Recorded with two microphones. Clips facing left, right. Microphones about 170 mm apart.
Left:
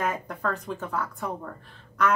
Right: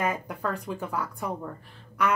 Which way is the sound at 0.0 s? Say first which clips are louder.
Even; 10° right (ahead or behind).